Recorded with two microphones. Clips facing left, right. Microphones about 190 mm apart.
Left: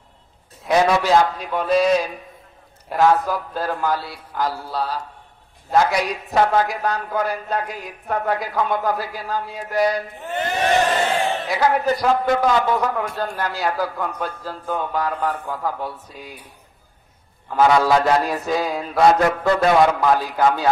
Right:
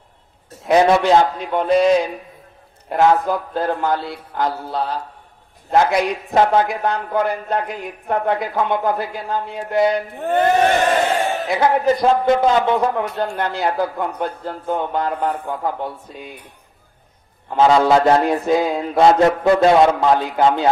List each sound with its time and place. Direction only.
0.7 s a man's voice: 25° right (ahead or behind)
6.3 s a man's voice: 25° right (ahead or behind)
10.1 s speech: 55° right (ahead or behind)
11.4 s a man's voice: 25° right (ahead or behind)
17.5 s a man's voice: 25° right (ahead or behind)